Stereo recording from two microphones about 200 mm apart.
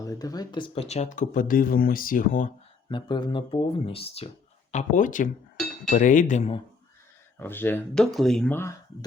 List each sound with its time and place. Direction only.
0.0 s speech: 15° left (ahead or behind); by 2.5 s 45° left (ahead or behind)
2.9 s speech: 20° left (ahead or behind)
7.3 s speech: 10° left (ahead or behind)